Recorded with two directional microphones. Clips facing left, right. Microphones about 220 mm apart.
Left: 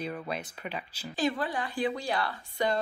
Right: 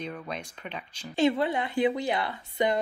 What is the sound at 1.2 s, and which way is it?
Speech, 25° right (ahead or behind).